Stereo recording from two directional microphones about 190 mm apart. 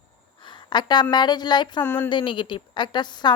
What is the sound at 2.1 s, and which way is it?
A woman's voice, 25° left (ahead or behind).